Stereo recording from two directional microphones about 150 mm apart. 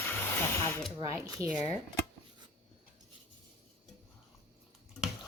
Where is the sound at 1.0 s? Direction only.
20° right (ahead or behind).